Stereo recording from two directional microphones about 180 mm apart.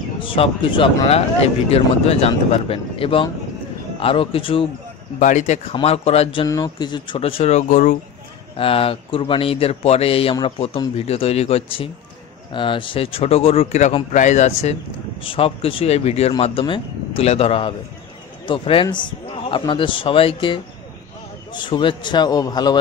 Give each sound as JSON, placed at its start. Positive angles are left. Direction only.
{"t": 0.2, "sound": "a man's voice", "side_deg": 30}
{"t": 5.2, "sound": "speech", "side_deg": 40}
{"t": 6.4, "sound": "speech", "side_deg": 20}
{"t": 8.5, "sound": "a man's voice", "side_deg": 30}